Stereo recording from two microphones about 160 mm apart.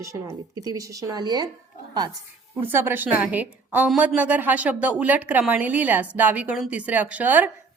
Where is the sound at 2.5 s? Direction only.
15° right (ahead or behind).